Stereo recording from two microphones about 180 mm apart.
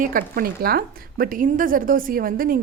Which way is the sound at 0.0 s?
50° right (ahead or behind).